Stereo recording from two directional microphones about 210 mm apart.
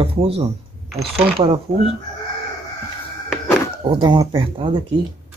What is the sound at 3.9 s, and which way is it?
Speech, 20° right (ahead or behind).